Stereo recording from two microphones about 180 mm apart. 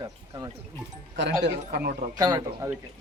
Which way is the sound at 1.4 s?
60° right (ahead or behind).